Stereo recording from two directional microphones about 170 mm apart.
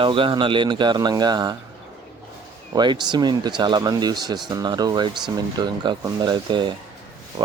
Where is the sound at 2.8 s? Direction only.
25° right (ahead or behind).